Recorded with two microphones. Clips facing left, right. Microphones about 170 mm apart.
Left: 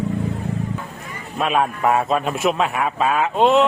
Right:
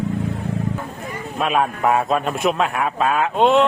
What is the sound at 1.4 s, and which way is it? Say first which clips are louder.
A man's voice: even; centre (ahead or behind).